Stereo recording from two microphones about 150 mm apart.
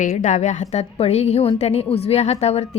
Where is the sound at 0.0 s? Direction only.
55° left (ahead or behind).